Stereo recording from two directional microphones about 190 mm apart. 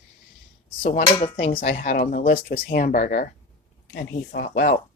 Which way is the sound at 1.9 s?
50° left (ahead or behind).